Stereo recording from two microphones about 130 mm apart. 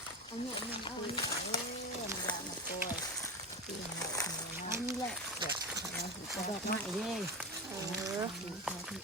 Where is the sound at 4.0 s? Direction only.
30° left (ahead or behind).